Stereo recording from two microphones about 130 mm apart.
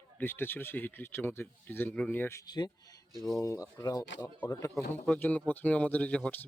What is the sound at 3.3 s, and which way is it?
Speech, 25° left (ahead or behind).